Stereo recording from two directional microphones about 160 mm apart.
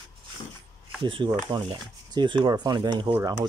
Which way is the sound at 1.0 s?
30° right (ahead or behind).